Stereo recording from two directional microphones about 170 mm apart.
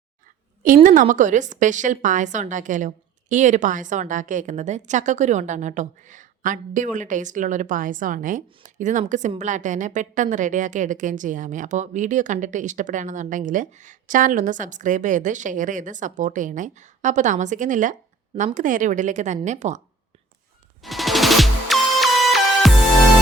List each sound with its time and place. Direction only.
0.9 s a woman's voice: 50° right (ahead or behind)
20.8 s music: centre (ahead or behind)